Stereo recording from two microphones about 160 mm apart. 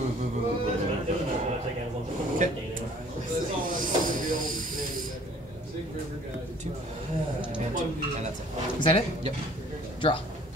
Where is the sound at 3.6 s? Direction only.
55° right (ahead or behind).